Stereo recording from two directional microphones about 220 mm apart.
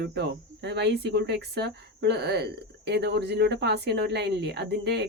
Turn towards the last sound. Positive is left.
turn(degrees=-50)  # may be behind; listen again after turning